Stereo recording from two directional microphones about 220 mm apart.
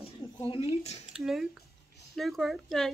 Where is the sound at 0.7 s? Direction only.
30° left (ahead or behind).